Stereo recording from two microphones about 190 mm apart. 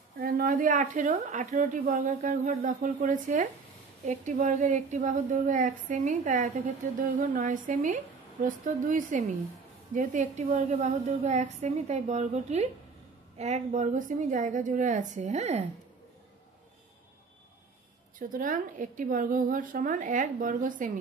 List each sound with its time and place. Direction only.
0.2 s a woman's voice: 50° right (ahead or behind)
18.2 s speech: 45° right (ahead or behind)